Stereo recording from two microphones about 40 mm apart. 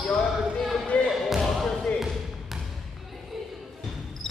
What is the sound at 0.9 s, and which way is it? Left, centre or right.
Basketball bounce, left.